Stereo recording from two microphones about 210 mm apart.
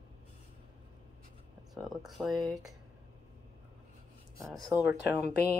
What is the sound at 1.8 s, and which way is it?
Speech, centre (ahead or behind).